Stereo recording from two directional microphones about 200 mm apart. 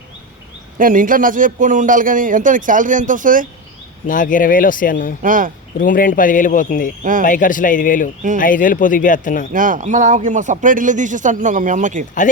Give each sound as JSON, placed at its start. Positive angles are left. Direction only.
{"t": 0.8, "sound": "a man's voice", "side_deg": -40}
{"t": 4.0, "sound": "speech", "side_deg": 40}
{"t": 5.2, "sound": "a man's voice", "side_deg": -40}
{"t": 5.8, "sound": "speech", "side_deg": 45}
{"t": 7.0, "sound": "a man's voice", "side_deg": -40}
{"t": 7.3, "sound": "speech", "side_deg": 40}
{"t": 9.5, "sound": "a man's voice", "side_deg": -40}